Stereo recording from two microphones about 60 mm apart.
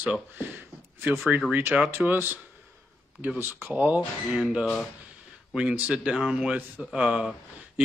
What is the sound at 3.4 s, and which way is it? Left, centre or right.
Speech, right.